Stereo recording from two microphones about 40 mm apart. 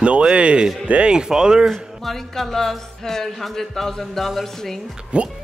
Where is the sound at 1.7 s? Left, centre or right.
Centre.